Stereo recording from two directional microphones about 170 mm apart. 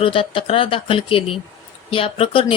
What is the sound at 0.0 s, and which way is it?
Speech, 30° left (ahead or behind).